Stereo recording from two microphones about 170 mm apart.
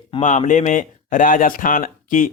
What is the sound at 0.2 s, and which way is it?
Speech, 45° left (ahead or behind).